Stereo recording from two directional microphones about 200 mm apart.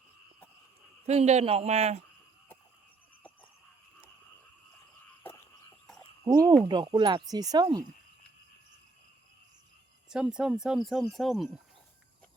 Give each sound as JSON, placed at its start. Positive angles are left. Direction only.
{"t": 1.0, "sound": "speech", "side_deg": -35}
{"t": 6.2, "sound": "speech", "side_deg": -20}
{"t": 10.1, "sound": "speech", "side_deg": -5}